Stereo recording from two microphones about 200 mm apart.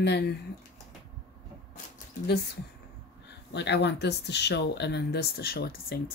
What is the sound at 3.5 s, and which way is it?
Speech, 60° left (ahead or behind).